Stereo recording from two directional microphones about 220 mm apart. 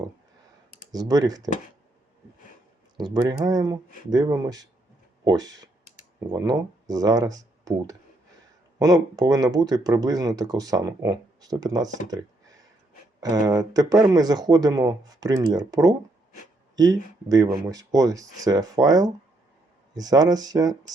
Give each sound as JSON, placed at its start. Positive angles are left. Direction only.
{"t": 0.9, "sound": "speech", "side_deg": -15}
{"t": 3.0, "sound": "speech", "side_deg": -20}
{"t": 13.1, "sound": "speech", "side_deg": -15}